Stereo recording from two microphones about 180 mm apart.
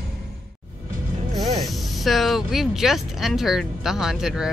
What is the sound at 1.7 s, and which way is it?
Speech, centre (ahead or behind).